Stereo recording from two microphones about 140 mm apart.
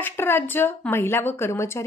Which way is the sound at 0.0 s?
15° left (ahead or behind).